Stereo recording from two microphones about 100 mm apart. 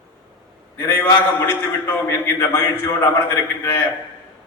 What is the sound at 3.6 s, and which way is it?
Speech, 20° left (ahead or behind).